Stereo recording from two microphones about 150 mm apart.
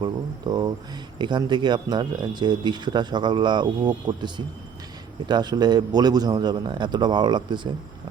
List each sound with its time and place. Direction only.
0.0 s a man's voice: 30° right (ahead or behind)